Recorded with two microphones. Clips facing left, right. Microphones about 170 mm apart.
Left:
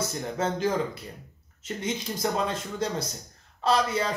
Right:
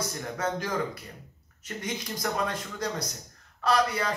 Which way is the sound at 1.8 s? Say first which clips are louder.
Left 3 dB; 25° left (ahead or behind).